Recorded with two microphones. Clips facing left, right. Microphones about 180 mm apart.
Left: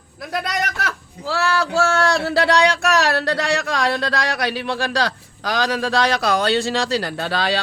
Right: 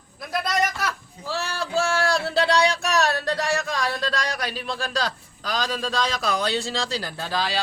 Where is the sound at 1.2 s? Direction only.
90° left.